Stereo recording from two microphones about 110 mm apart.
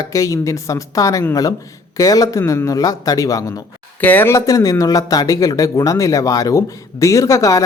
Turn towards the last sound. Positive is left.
turn(degrees=30)  # may be behind; listen again after turning